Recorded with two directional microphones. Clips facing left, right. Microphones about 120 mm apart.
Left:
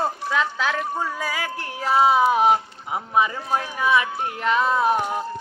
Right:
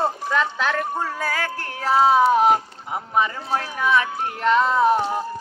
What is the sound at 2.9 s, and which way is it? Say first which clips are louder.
Speech: left 1 dB; 10° left (ahead or behind).